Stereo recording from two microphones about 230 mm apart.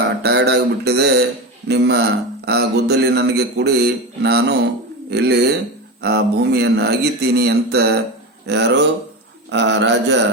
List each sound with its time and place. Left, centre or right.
0.2 s speech: right